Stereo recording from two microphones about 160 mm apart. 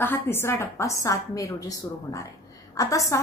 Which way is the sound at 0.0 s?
15° left (ahead or behind).